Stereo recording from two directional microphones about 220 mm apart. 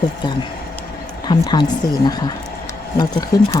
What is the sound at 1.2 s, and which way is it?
Speech, 20° left (ahead or behind).